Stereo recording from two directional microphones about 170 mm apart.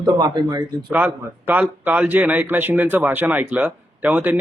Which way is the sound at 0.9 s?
10° right (ahead or behind).